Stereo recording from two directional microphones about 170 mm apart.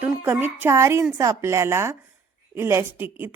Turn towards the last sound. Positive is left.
turn(degrees=-10)  # may be behind; listen again after turning